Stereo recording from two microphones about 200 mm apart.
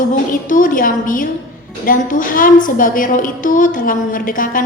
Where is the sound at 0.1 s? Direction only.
40° left (ahead or behind).